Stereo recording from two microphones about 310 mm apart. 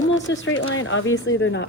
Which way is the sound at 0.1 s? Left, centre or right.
Left.